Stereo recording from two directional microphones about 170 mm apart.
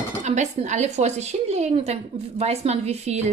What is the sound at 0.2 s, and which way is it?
Speech, 45° right (ahead or behind).